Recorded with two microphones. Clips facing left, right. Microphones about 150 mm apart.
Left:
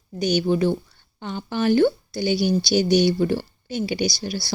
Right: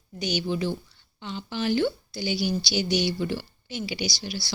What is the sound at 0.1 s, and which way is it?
A woman's voice, 45° left (ahead or behind).